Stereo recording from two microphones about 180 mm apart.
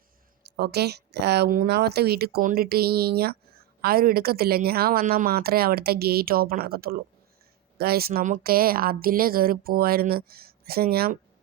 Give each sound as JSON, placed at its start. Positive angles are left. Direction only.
{"t": 0.4, "sound": "speech", "side_deg": -65}